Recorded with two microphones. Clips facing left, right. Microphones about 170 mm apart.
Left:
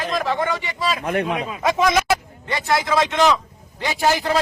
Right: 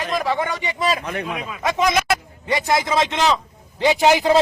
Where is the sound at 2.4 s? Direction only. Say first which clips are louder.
Right 2 dB; 15° right (ahead or behind).